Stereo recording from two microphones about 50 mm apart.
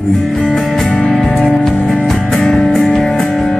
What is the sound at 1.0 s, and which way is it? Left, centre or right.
Music, centre.